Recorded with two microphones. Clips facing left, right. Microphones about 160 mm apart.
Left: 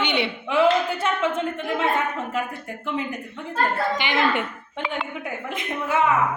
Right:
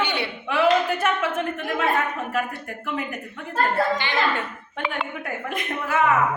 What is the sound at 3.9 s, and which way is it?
Speech, 20° left (ahead or behind).